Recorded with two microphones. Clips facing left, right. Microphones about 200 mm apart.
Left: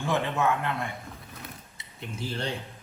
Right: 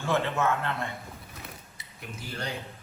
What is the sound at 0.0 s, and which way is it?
Speech, 15° left (ahead or behind).